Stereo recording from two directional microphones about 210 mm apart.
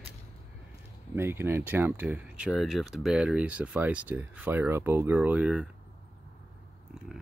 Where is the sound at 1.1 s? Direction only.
10° right (ahead or behind).